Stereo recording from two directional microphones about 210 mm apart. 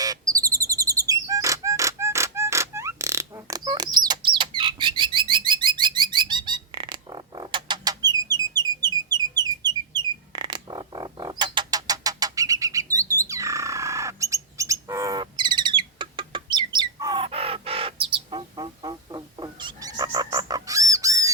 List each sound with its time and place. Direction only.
0.0 s chirp: 15° right (ahead or behind)
14.6 s bird: 15° right (ahead or behind)